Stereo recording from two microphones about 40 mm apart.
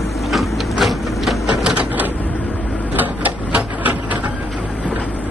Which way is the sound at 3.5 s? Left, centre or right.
Right.